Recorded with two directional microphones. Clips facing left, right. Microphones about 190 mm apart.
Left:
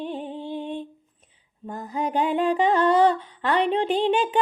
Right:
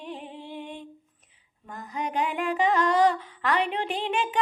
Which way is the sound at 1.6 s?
30° left (ahead or behind).